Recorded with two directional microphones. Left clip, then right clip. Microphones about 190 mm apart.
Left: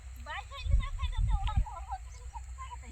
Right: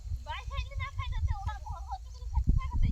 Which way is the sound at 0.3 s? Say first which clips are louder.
Even; 35° right (ahead or behind).